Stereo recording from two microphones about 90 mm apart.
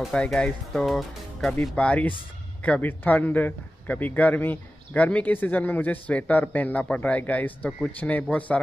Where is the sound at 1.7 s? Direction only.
15° left (ahead or behind).